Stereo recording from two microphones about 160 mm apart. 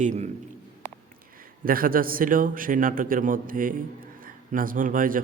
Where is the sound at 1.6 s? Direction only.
65° right (ahead or behind).